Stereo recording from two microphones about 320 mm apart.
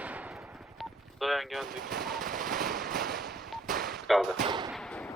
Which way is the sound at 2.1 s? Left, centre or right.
Right.